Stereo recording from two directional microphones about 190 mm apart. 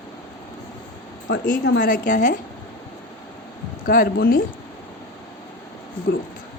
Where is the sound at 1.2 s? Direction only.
50° left (ahead or behind).